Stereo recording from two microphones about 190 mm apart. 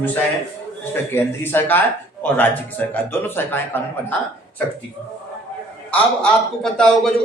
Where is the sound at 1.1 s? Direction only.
10° left (ahead or behind).